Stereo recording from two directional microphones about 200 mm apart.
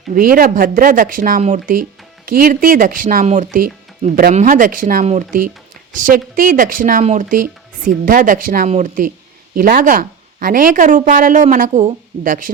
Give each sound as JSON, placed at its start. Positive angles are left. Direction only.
{"t": 0.1, "sound": "speech", "side_deg": -45}